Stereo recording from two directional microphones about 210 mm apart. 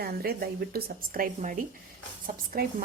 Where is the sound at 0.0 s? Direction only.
45° right (ahead or behind).